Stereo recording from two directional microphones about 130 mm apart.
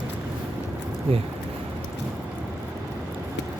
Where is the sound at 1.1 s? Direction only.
50° right (ahead or behind).